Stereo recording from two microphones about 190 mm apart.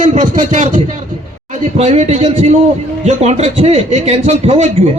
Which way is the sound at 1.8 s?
35° right (ahead or behind).